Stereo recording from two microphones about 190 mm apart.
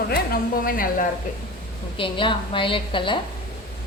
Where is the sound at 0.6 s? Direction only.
50° left (ahead or behind).